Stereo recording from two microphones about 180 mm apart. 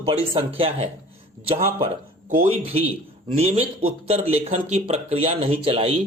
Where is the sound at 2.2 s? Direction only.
50° right (ahead or behind).